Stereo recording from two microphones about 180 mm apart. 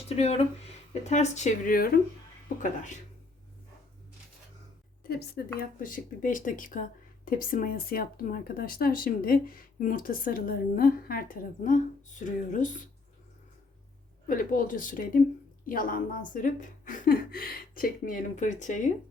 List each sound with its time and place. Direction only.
0.2 s speech: 35° left (ahead or behind)
5.0 s speech: 60° left (ahead or behind)
14.3 s speech: 50° left (ahead or behind)